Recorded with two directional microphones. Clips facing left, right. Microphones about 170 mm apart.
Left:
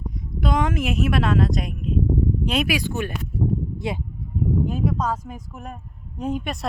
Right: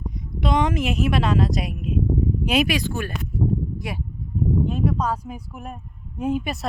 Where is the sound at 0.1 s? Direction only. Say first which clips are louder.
Right 1 dB; centre (ahead or behind).